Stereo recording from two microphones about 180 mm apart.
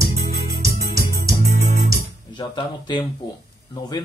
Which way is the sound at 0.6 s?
20° right (ahead or behind).